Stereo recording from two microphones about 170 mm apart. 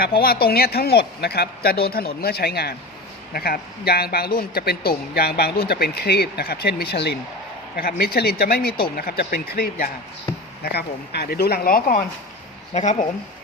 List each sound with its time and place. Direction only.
0.0 s speech: 60° left (ahead or behind)
7.8 s speech: 60° left (ahead or behind)
10.6 s speech: 70° left (ahead or behind)
12.7 s speech: 45° left (ahead or behind)